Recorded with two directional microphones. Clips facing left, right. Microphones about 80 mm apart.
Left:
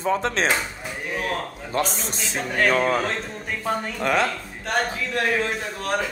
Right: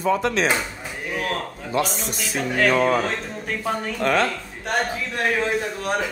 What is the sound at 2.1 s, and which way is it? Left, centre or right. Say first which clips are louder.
Speech: right 2 dB; left.